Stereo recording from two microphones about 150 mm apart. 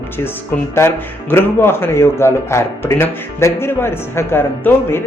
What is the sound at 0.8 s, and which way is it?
Speech, 15° left (ahead or behind).